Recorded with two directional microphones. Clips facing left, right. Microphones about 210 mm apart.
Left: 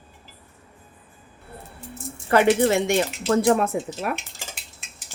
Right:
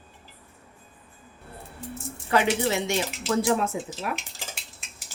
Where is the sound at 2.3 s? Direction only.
55° left (ahead or behind).